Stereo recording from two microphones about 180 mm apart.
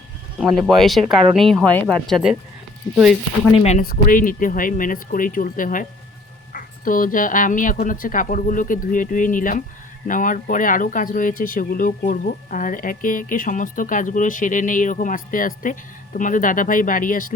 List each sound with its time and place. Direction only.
0.3 s speech: centre (ahead or behind)
3.5 s speech: 35° left (ahead or behind)
3.8 s speech: 50° left (ahead or behind)